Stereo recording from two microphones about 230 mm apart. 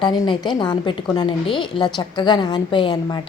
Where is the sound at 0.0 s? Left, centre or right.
Centre.